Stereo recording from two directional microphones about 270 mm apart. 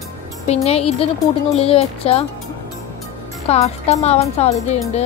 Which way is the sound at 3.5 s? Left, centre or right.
Left.